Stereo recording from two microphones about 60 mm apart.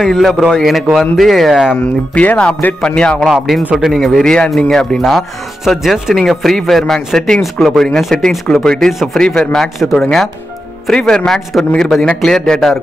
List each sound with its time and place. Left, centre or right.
0.0 s speech: centre
1.7 s a man's voice: left
3.2 s a man's voice: centre
5.7 s a man's voice: centre